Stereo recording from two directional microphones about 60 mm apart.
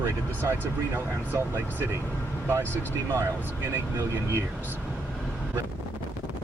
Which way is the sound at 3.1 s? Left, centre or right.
Right.